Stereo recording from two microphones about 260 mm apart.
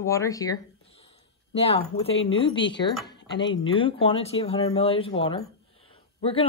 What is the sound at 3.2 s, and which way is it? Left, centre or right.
Dishes, left.